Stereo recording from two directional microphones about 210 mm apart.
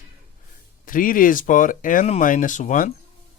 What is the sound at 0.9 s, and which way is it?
Speech, 40° left (ahead or behind).